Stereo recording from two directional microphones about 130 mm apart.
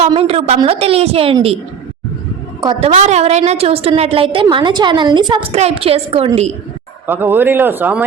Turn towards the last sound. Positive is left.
turn(degrees=-15)  # may be behind; listen again after turning